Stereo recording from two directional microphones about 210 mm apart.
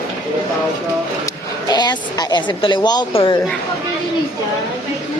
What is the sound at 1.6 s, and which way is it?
Speech, 20° left (ahead or behind).